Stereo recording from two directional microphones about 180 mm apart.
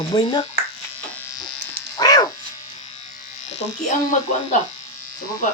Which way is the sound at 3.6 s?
40° left (ahead or behind).